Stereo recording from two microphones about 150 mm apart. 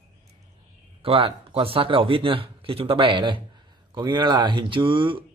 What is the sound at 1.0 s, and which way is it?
Speech, 40° right (ahead or behind).